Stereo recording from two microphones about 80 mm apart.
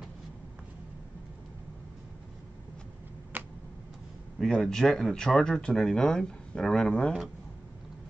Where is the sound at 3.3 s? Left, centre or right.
Right.